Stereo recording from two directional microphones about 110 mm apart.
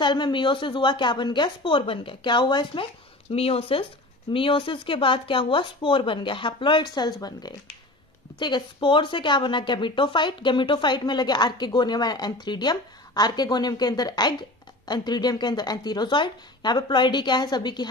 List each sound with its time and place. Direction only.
0.0 s a woman's voice: 45° left (ahead or behind)